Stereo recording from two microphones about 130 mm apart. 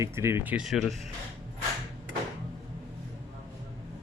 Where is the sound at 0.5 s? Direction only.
Centre (ahead or behind).